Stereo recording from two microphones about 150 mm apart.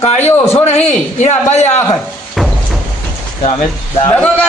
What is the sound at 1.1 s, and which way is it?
Speech, 50° left (ahead or behind).